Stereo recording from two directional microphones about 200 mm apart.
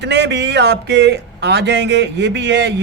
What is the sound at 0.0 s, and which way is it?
Speech, 60° right (ahead or behind).